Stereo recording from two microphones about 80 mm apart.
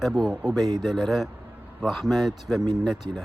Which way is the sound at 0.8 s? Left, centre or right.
Centre.